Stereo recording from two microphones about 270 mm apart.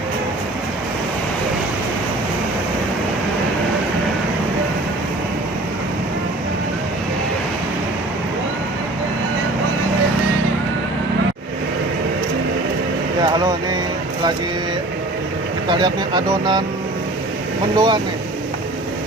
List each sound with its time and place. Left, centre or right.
15.6 s vehicle: centre
17.7 s speech: centre